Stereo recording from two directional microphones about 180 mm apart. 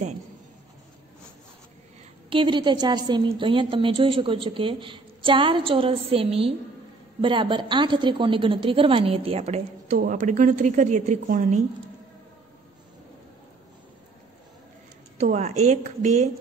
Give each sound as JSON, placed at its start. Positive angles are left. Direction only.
{"t": 2.2, "sound": "a woman's voice", "side_deg": -30}
{"t": 15.1, "sound": "a woman's voice", "side_deg": -40}